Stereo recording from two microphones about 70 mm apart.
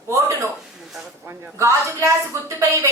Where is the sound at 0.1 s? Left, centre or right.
Right.